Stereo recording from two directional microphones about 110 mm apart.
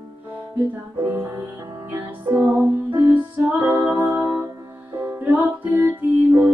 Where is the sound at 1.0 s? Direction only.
20° right (ahead or behind).